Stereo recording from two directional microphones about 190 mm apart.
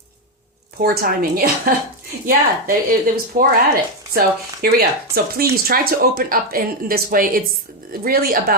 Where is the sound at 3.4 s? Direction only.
45° right (ahead or behind).